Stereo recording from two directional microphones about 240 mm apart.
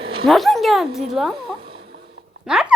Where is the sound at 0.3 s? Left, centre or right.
Centre.